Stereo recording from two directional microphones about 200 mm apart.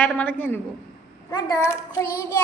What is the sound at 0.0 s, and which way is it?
Child singing, 10° left (ahead or behind).